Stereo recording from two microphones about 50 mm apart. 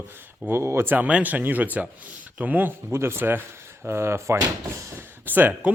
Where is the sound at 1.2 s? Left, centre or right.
Right.